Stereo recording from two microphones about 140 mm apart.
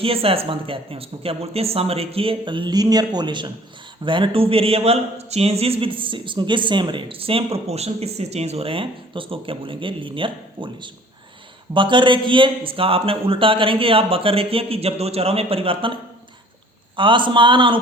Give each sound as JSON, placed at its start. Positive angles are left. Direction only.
{"t": 0.0, "sound": "speech", "side_deg": -40}
{"t": 17.0, "sound": "speech", "side_deg": -35}